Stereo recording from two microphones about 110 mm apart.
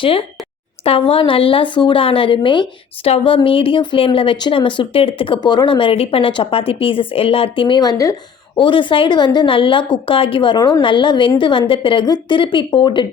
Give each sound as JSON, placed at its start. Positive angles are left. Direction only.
{"t": 0.0, "sound": "a woman's voice", "side_deg": 55}
{"t": 5.4, "sound": "speech", "side_deg": 40}
{"t": 7.8, "sound": "a woman's voice", "side_deg": 35}
{"t": 8.5, "sound": "a woman's voice", "side_deg": 50}